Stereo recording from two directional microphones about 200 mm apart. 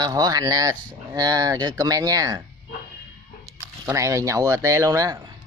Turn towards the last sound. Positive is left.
turn(degrees=-20)  # may be behind; listen again after turning